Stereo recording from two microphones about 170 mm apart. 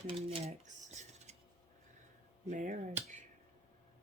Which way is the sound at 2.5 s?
45° right (ahead or behind).